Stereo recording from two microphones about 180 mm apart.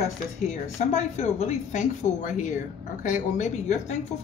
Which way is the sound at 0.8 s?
35° left (ahead or behind).